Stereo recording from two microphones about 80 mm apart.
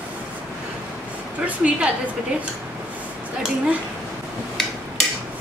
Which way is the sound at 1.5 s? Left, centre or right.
Centre.